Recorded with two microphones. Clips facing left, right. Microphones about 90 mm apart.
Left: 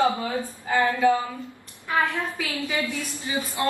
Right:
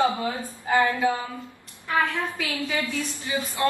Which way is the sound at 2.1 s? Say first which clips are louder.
Even; 20° left (ahead or behind).